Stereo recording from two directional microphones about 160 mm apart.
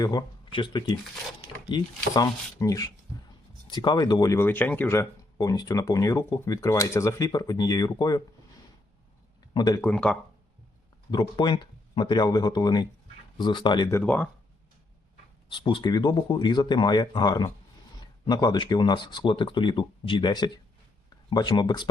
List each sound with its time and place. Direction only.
0.0 s speech: 25° left (ahead or behind)
9.6 s speech: 25° left (ahead or behind)
9.8 s speech: 5° left (ahead or behind)
11.1 s speech: 30° left (ahead or behind)
13.9 s speech: 10° left (ahead or behind)
15.4 s speech: 30° left (ahead or behind)